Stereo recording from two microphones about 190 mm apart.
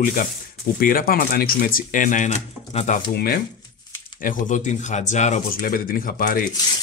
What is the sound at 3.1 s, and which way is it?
A man's voice, 50° left (ahead or behind).